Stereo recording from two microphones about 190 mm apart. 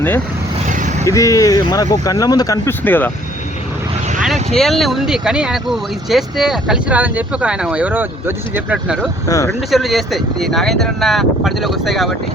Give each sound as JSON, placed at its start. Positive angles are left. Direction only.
{"t": 0.7, "sound": "vehicle", "side_deg": -45}
{"t": 1.0, "sound": "speech", "side_deg": 15}
{"t": 4.5, "sound": "speech", "side_deg": 0}
{"t": 9.3, "sound": "speech", "side_deg": 15}
{"t": 9.7, "sound": "speech", "side_deg": 0}